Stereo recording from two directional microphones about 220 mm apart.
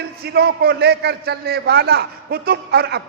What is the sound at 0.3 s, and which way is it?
A man's voice, 45° right (ahead or behind).